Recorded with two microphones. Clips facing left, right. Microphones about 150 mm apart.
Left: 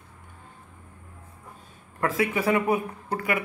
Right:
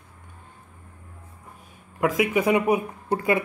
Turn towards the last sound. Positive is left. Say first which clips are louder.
# right 5 dB
turn(degrees=-25)  # may be behind; listen again after turning